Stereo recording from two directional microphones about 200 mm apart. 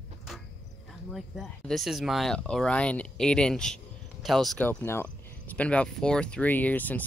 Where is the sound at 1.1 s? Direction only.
Centre (ahead or behind).